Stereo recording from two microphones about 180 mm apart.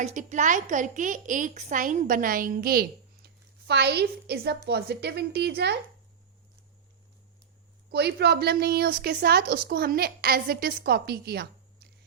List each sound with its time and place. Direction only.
0.0 s a woman's voice: 40° right (ahead or behind); by 5.7 s 65° right (ahead or behind)
7.9 s a woman's voice: 65° right (ahead or behind)